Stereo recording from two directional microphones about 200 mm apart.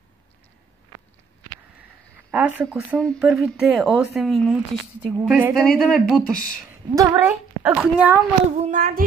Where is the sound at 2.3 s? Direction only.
10° right (ahead or behind).